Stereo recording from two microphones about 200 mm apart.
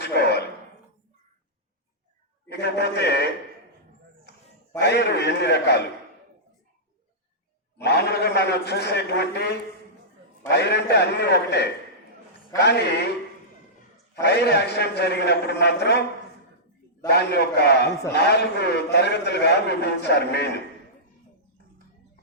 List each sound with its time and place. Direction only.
0.0 s a sound: 55° left (ahead or behind)
2.5 s a man's voice: 55° left (ahead or behind)
4.3 s a sound: 55° left (ahead or behind)
4.8 s a man's voice: 55° left (ahead or behind)
7.8 s a man's voice: 55° left (ahead or behind)
14.2 s a man's voice: 55° left (ahead or behind)
17.1 s a man's voice: 55° left (ahead or behind)